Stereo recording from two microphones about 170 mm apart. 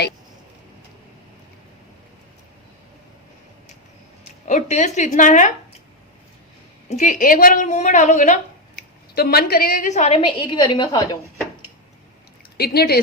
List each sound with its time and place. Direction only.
4.4 s a woman's voice: 45° left (ahead or behind)
6.9 s a woman's voice: 50° left (ahead or behind)
8.7 s a woman's voice: 65° left (ahead or behind); by 11.2 s 25° left (ahead or behind)
12.5 s speech: 65° left (ahead or behind)